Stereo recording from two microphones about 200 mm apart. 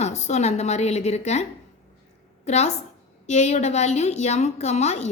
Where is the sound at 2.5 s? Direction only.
35° left (ahead or behind).